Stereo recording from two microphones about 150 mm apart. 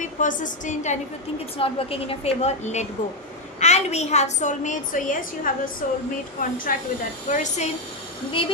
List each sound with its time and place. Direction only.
0.0 s a woman's voice: 60° left (ahead or behind)
1.5 s a woman's voice: 40° left (ahead or behind); by 6.8 s 70° left (ahead or behind)
7.3 s a woman's voice: 55° left (ahead or behind)
8.3 s a woman's voice: 35° left (ahead or behind)